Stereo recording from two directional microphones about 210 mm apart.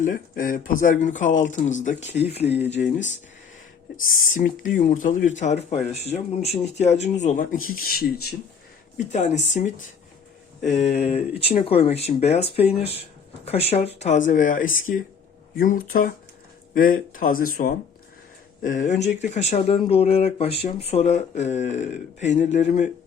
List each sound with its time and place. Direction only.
0.0 s speech: 40° left (ahead or behind)
9.0 s speech: 35° left (ahead or behind)